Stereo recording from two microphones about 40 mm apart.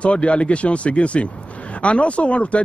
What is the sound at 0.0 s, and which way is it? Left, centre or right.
A man's voice, left.